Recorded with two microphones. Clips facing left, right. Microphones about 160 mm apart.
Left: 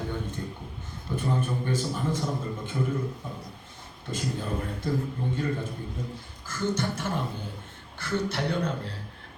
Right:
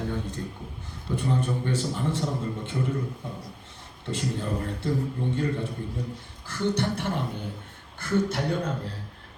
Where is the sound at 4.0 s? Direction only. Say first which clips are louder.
Right 2 dB; 75° right (ahead or behind).